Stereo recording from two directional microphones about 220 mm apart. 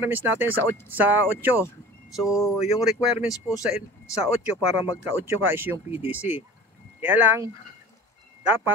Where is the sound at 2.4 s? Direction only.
15° left (ahead or behind).